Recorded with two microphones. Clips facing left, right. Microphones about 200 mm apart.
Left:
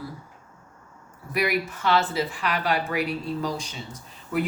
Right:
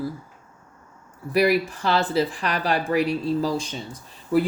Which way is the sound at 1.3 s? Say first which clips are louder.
Right 6 dB; 35° right (ahead or behind).